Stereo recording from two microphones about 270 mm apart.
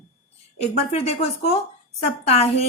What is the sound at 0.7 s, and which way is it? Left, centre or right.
A woman's voice, left.